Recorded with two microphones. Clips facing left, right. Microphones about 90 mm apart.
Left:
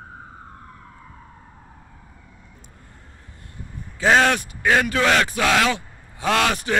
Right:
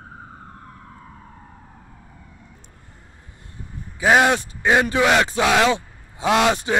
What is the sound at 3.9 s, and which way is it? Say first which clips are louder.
Speech: right 1 dB; 15° right (ahead or behind).